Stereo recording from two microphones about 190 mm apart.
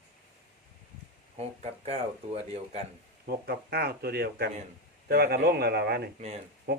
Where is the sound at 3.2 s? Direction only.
55° right (ahead or behind).